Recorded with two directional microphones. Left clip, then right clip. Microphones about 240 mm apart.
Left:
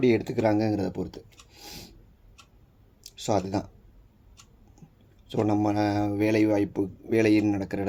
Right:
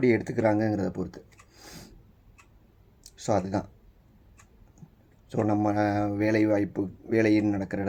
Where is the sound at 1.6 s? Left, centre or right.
Centre.